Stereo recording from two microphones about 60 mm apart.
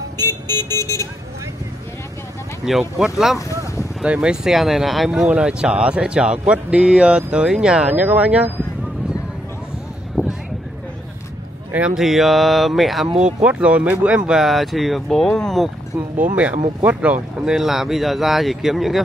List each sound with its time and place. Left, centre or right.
0.2 s vehicle: left
2.6 s speech: centre
4.0 s speech: centre
5.3 s speech: centre
7.9 s speech: right
10.2 s a sound: right
11.9 s speech: centre
13.2 s speech: centre
14.4 s speech: centre
16.3 s speech: right
17.5 s speech: centre